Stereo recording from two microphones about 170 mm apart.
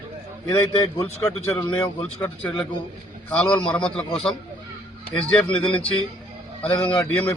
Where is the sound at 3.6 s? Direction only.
5° left (ahead or behind).